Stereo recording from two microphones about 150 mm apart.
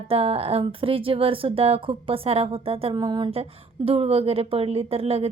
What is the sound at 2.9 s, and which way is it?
Speech, 30° right (ahead or behind).